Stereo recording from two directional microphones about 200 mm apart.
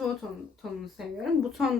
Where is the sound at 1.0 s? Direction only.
Centre (ahead or behind).